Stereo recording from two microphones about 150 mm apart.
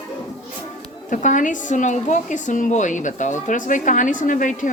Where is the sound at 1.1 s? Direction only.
60° left (ahead or behind).